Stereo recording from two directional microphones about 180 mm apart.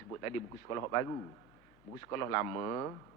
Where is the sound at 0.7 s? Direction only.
15° left (ahead or behind).